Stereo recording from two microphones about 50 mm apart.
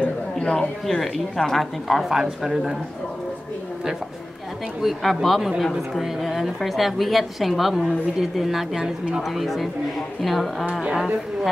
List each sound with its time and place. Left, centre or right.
0.5 s a woman's voice: centre
2.0 s a woman's voice: centre
4.8 s a woman's voice: centre
10.7 s speech: centre